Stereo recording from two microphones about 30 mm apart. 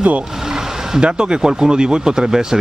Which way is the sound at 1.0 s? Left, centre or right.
Right.